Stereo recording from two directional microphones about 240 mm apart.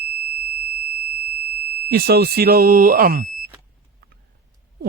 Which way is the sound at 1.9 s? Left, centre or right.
Right.